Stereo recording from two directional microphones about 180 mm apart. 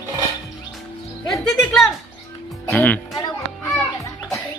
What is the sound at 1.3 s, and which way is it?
Music, centre (ahead or behind).